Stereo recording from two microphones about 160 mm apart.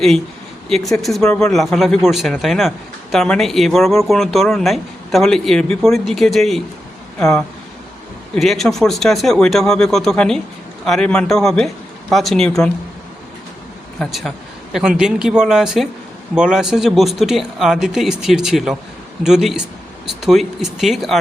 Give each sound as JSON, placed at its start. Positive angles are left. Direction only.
{"t": 0.7, "sound": "speech", "side_deg": 0}
{"t": 14.0, "sound": "speech", "side_deg": 0}